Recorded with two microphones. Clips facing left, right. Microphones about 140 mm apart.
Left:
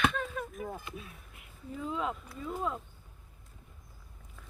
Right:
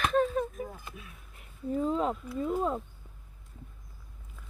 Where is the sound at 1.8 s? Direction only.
40° right (ahead or behind).